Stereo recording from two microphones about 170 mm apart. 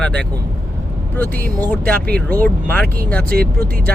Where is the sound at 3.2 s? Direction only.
60° right (ahead or behind).